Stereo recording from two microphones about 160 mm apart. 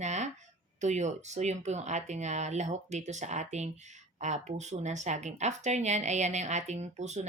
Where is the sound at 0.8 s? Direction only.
45° right (ahead or behind).